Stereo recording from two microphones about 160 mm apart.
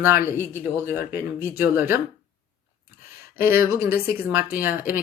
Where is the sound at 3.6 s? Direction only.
70° left (ahead or behind).